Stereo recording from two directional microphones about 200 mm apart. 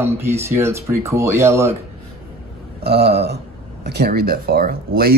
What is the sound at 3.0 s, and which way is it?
Speech, 55° right (ahead or behind).